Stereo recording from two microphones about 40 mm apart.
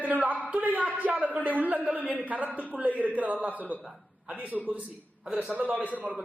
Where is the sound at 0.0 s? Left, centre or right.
Right.